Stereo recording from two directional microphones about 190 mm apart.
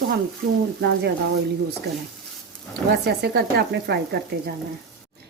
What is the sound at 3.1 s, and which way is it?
A woman's voice, 55° right (ahead or behind).